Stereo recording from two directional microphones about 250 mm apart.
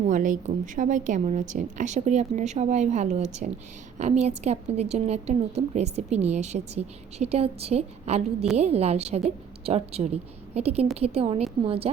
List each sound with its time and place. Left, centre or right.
0.0 s a woman's voice: right